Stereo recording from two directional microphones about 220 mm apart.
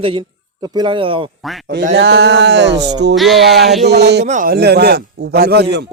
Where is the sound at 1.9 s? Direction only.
50° right (ahead or behind).